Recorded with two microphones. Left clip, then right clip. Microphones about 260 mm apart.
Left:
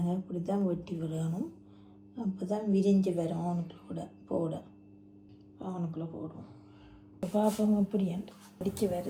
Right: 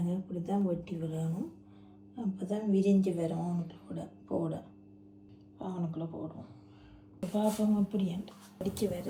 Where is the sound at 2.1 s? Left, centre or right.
Centre.